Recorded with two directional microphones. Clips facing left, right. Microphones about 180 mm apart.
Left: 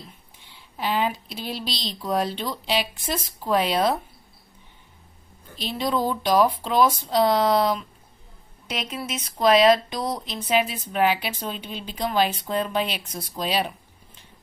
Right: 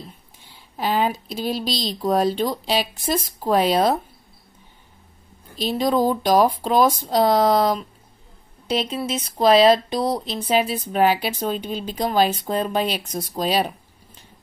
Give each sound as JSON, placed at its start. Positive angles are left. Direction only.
{"t": 0.7, "sound": "speech", "side_deg": -40}
{"t": 5.6, "sound": "speech", "side_deg": -40}
{"t": 8.6, "sound": "speech", "side_deg": -30}